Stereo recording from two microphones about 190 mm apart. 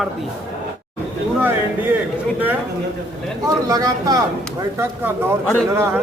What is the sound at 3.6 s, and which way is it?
Speech, 20° right (ahead or behind).